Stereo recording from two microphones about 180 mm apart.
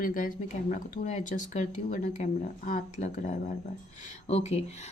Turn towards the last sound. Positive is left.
turn(degrees=35)  # may be behind; listen again after turning